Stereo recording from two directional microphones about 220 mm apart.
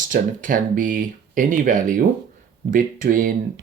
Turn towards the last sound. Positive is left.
turn(degrees=-40)  # may be behind; listen again after turning